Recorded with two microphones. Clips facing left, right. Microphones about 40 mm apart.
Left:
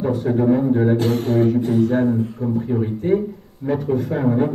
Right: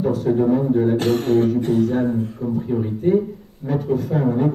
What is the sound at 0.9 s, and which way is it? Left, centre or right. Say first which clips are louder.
Speech: right 1 dB; right.